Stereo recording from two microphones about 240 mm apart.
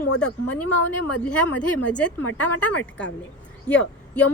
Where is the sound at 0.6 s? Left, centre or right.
Left.